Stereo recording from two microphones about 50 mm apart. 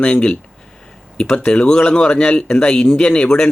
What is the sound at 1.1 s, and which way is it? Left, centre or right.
Speech, left.